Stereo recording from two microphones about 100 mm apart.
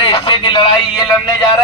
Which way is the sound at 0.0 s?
55° left (ahead or behind).